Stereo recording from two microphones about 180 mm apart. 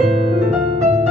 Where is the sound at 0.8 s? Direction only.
40° right (ahead or behind).